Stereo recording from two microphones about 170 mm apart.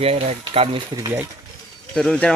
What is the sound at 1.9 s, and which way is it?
Speech, 5° left (ahead or behind).